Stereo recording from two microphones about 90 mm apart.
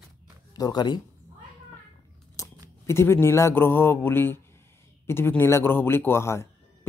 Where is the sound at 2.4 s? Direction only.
40° left (ahead or behind).